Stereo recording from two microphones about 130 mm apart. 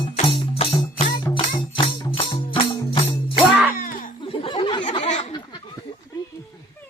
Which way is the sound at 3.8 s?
90° left.